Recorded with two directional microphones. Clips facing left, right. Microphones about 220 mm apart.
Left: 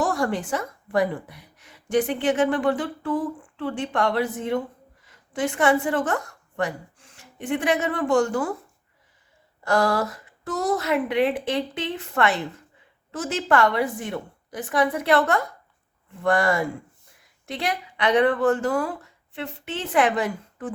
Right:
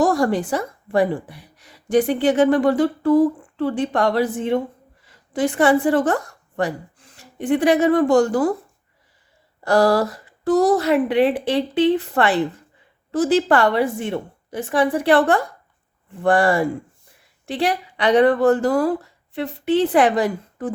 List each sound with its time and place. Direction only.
0.0 s a woman's voice: 40° right (ahead or behind)
9.6 s speech: 35° right (ahead or behind)